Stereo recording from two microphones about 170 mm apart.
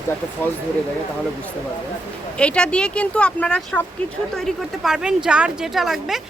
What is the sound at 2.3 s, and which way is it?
Speech, 5° left (ahead or behind).